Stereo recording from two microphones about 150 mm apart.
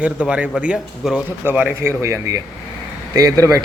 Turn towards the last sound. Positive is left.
turn(degrees=-20)  # may be behind; listen again after turning